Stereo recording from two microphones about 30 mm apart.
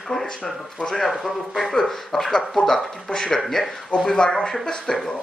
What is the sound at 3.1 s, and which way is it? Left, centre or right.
Speech, left.